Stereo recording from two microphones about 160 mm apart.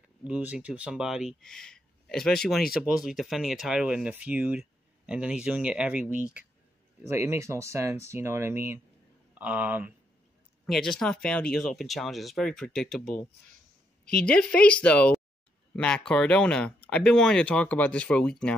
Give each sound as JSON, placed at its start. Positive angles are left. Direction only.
{"t": 0.3, "sound": "speech", "side_deg": -10}
{"t": 7.1, "sound": "speech", "side_deg": -15}
{"t": 10.7, "sound": "speech", "side_deg": 0}